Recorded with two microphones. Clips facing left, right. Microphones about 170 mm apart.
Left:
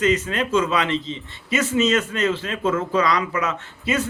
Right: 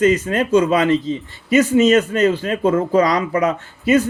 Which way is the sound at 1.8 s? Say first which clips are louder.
Right 7 dB; 35° right (ahead or behind).